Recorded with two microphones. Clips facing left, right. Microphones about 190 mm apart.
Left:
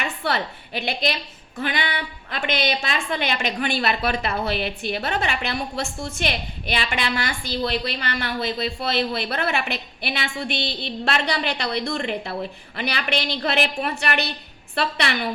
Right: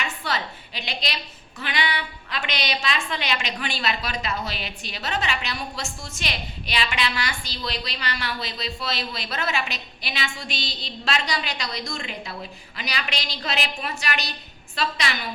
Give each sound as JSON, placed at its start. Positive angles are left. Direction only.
{"t": 0.0, "sound": "a woman's voice", "side_deg": 60}